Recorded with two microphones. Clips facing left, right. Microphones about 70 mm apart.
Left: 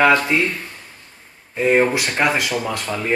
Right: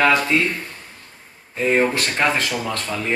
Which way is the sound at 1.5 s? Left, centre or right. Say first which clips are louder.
Left 2 dB; centre.